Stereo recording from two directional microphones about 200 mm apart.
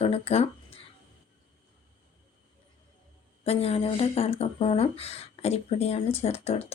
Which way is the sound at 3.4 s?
30° left (ahead or behind).